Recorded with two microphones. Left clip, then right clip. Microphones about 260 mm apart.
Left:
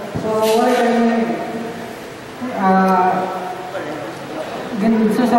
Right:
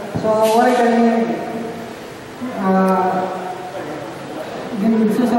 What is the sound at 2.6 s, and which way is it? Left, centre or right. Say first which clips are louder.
Speech: left 2 dB; centre.